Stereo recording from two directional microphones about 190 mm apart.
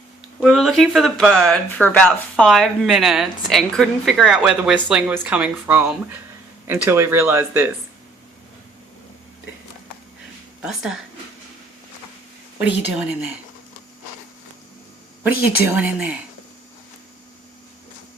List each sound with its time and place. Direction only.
0.4 s a woman's voice: centre (ahead or behind)
1.8 s a woman's voice: 5° left (ahead or behind); by 7.7 s 10° right (ahead or behind)
10.6 s a woman's voice: 5° right (ahead or behind)
12.5 s speech: 10° right (ahead or behind)
15.2 s speech: 10° right (ahead or behind)